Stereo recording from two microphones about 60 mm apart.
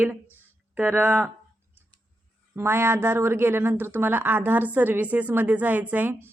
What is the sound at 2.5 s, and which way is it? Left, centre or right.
Speech, right.